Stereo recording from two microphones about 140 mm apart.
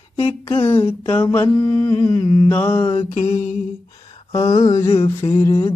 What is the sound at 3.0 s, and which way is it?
Mantra, 50° left (ahead or behind).